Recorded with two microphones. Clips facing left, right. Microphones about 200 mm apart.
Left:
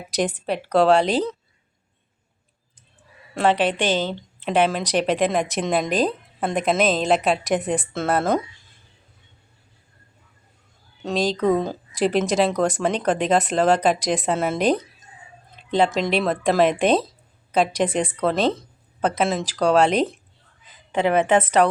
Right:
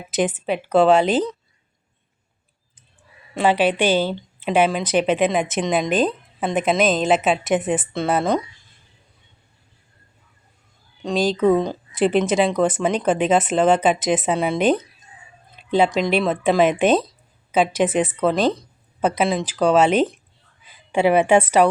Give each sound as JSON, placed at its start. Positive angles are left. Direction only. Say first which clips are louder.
{"t": 0.1, "sound": "speech", "louder": "right 2 dB", "side_deg": -5}
{"t": 3.3, "sound": "speech", "louder": "right 2 dB", "side_deg": -5}
{"t": 11.0, "sound": "a woman's voice", "louder": "right 3 dB", "side_deg": 0}